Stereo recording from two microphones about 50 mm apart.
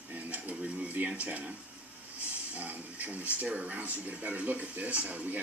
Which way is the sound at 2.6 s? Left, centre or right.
Right.